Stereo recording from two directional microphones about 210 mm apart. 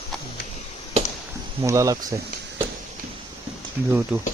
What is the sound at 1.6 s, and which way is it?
Speech, 15° right (ahead or behind).